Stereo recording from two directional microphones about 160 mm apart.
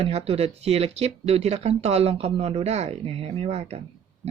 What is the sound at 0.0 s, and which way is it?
Speech, 40° right (ahead or behind).